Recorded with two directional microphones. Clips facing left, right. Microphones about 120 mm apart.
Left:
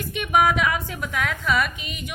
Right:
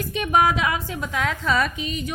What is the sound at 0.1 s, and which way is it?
A woman's voice, 35° right (ahead or behind).